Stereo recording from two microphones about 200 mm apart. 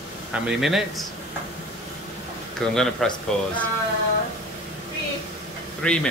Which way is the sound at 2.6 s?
5° left (ahead or behind).